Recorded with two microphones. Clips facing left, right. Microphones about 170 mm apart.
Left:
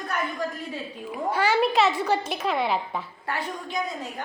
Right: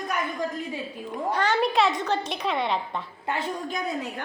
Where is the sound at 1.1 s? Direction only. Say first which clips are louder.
Left 1 dB; 5° left (ahead or behind).